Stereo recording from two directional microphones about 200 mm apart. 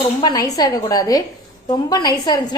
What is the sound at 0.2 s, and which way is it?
A woman's voice, 20° left (ahead or behind).